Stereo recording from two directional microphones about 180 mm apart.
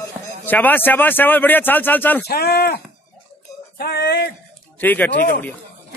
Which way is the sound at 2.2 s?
60° left (ahead or behind).